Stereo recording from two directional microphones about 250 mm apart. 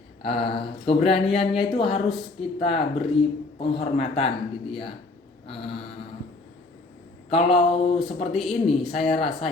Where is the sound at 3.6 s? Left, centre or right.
Left.